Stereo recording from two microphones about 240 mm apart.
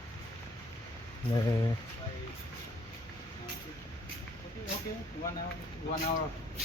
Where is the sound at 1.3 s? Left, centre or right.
Centre.